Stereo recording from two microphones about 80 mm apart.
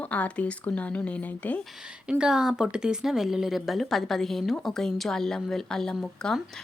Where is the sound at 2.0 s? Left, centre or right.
Centre.